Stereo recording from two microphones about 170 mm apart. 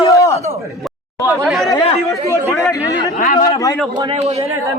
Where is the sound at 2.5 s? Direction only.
15° left (ahead or behind).